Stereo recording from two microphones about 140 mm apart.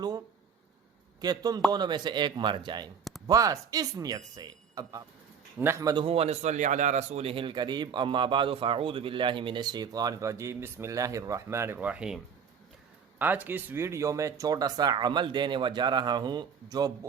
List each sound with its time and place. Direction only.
1.2 s a man's voice: 25° right (ahead or behind)
6.1 s a man's voice: 45° right (ahead or behind); by 17.1 s 25° right (ahead or behind)